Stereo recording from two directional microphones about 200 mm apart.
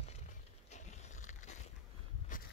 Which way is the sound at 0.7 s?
35° left (ahead or behind).